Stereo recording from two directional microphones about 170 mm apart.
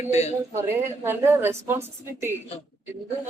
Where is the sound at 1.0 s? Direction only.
15° right (ahead or behind).